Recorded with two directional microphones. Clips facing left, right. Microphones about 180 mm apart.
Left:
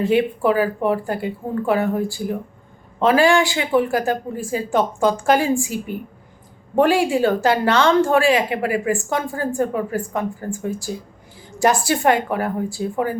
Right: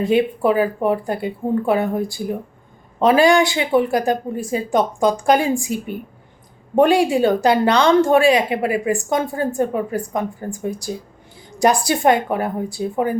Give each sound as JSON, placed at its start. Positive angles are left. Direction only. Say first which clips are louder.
{"t": 0.0, "sound": "a woman's voice", "louder": "right 1 dB", "side_deg": -20}